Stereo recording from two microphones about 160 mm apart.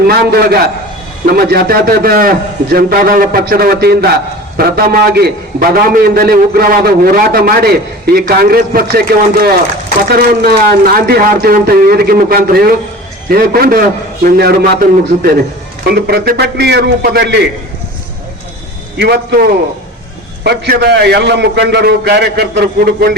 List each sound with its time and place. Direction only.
0.1 s a man's voice: 75° right (ahead or behind)
15.9 s a man's voice: 80° right
18.9 s a man's voice: 90° right